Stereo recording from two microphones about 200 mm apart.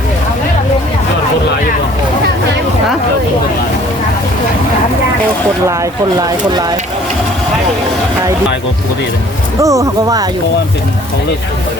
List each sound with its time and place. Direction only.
5.6 s speech: 15° right (ahead or behind)
9.6 s speech: 15° right (ahead or behind)